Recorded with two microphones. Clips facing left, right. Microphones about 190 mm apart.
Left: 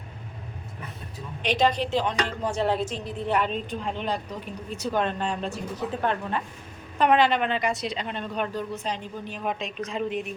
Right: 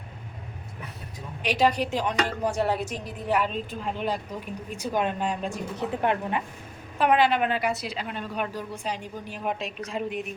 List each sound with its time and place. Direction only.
1.4 s a woman's voice: 10° right (ahead or behind)